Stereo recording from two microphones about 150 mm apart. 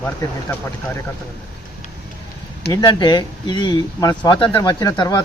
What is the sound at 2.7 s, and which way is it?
Speech, 25° left (ahead or behind).